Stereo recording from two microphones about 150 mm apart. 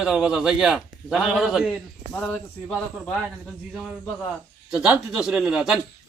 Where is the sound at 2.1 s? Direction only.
10° left (ahead or behind).